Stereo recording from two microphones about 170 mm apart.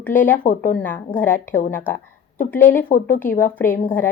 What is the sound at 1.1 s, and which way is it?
Speech, 10° left (ahead or behind).